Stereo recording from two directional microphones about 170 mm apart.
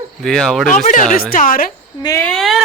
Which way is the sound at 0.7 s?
50° left (ahead or behind).